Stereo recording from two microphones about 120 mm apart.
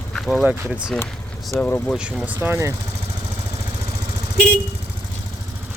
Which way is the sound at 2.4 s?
20° right (ahead or behind).